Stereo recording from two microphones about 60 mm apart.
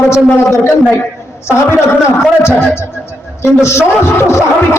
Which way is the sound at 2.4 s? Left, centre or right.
Left.